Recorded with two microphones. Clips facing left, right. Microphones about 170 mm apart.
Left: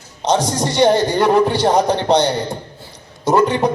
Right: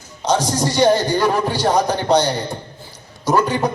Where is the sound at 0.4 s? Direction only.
25° left (ahead or behind).